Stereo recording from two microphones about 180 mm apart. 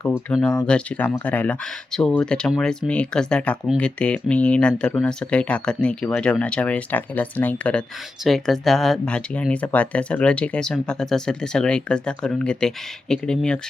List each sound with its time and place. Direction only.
0.3 s speech: 5° left (ahead or behind)